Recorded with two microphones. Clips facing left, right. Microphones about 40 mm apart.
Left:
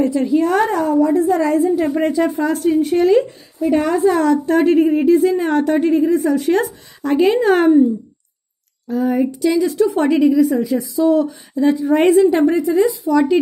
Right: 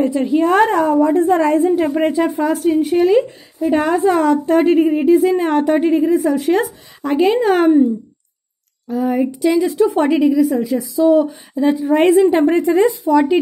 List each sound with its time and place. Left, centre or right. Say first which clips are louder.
0.0 s a woman's voice: even; right
0.3 s a woman's voice: right 5 dB; right
2.0 s a woman's voice: right 1 dB; right
2.2 s a woman's voice: right 1 dB; centre
3.7 s a woman's voice: even; right
4.2 s a woman's voice: right 1 dB; centre
6.1 s speech: right 1 dB; centre
8.8 s speech: even; centre
10.2 s a woman's voice: even; centre
11.2 s a woman's voice: even; centre
11.8 s speech: right 2 dB; centre
12.1 s a woman's voice: even; right
12.5 s a woman's voice: right 2 dB; right
13.1 s a woman's voice: right 1 dB; right